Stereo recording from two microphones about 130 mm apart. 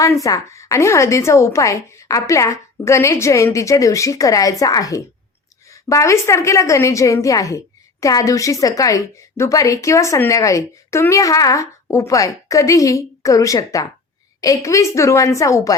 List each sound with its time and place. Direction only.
0.0 s a woman's voice: 25° left (ahead or behind)